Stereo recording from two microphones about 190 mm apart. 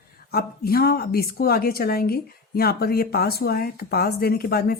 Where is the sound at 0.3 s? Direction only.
55° left (ahead or behind).